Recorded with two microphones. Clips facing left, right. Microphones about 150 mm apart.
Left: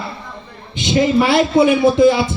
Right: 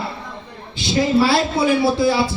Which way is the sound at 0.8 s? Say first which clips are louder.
Left 2 dB; 20° left (ahead or behind).